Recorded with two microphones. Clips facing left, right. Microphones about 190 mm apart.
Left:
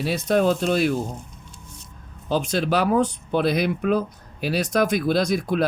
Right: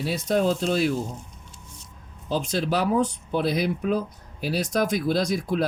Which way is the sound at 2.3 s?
65° left (ahead or behind).